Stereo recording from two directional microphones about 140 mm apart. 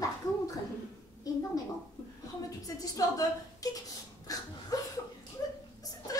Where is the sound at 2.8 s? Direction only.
25° left (ahead or behind).